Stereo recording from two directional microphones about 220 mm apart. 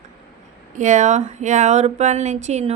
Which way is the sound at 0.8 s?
35° right (ahead or behind).